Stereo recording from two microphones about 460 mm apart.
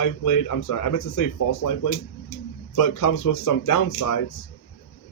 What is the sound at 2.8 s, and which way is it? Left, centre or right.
Speech, left.